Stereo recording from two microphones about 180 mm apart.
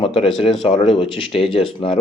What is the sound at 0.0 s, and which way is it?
Speech, 30° left (ahead or behind).